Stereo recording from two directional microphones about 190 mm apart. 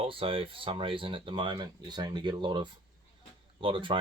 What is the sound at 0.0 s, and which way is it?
Speech, 30° right (ahead or behind).